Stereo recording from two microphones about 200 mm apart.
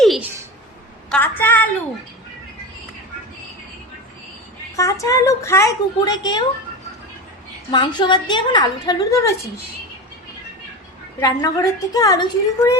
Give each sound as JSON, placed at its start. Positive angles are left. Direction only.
{"t": 0.0, "sound": "a sound", "side_deg": 0}
{"t": 1.4, "sound": "a woman's voice", "side_deg": 10}
{"t": 4.8, "sound": "a woman's voice", "side_deg": 15}
{"t": 7.7, "sound": "a woman's voice", "side_deg": 20}
{"t": 11.2, "sound": "a woman's voice", "side_deg": 20}